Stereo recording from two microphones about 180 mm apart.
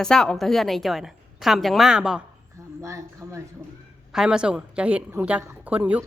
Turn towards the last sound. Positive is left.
turn(degrees=-5)  # may be behind; listen again after turning